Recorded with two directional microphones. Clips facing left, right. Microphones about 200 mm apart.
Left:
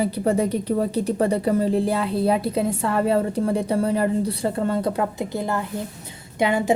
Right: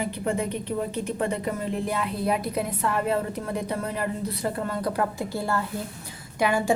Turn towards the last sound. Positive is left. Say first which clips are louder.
# left 3 dB
turn(degrees=25)  # may be behind; listen again after turning